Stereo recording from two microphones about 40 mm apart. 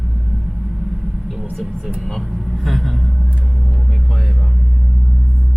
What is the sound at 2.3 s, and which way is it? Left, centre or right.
Vehicle, centre.